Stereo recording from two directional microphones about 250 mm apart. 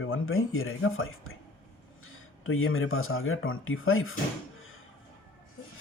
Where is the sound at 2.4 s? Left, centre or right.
Left.